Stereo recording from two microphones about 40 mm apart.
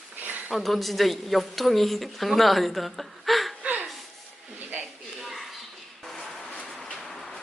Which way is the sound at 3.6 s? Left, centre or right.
Right.